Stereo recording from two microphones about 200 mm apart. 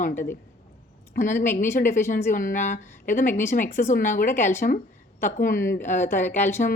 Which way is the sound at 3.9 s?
40° left (ahead or behind).